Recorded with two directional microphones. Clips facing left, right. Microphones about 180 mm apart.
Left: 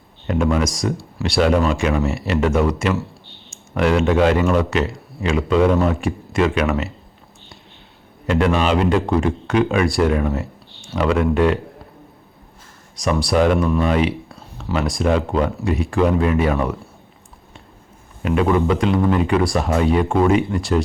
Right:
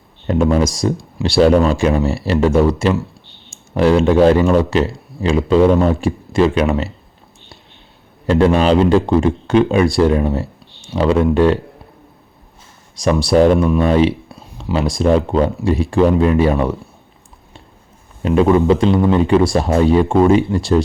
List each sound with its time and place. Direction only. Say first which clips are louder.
0.3 s speech: right 4 dB; 30° right (ahead or behind)
8.3 s speech: right 5 dB; 30° right (ahead or behind)
13.0 s speech: right 5 dB; 25° right (ahead or behind)
18.2 s speech: right 5 dB; 30° right (ahead or behind)